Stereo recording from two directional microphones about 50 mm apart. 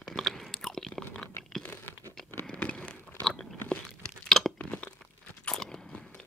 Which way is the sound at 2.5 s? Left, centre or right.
Left.